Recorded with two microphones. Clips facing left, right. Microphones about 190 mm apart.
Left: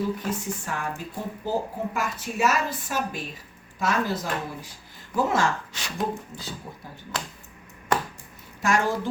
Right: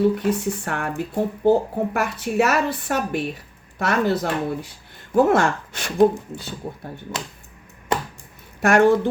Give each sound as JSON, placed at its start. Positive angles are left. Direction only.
{"t": 0.0, "sound": "speech", "side_deg": -65}
{"t": 8.6, "sound": "speech", "side_deg": -65}